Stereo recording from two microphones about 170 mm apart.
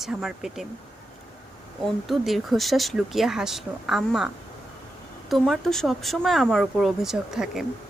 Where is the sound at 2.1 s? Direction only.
Centre (ahead or behind).